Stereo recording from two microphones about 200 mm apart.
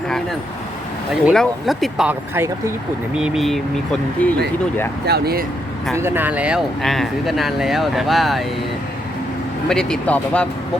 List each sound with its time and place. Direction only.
1.2 s speech: centre (ahead or behind)
5.0 s speech: 50° right (ahead or behind)
5.9 s speech: 10° right (ahead or behind)
9.6 s speech: 5° left (ahead or behind)